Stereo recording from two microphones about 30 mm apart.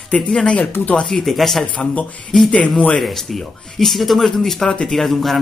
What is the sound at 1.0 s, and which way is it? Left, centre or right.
Speech, centre.